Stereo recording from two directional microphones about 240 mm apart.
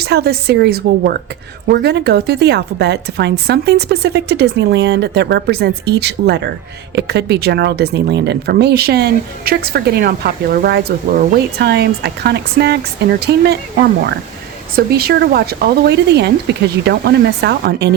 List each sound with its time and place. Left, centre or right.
0.0 s speech: right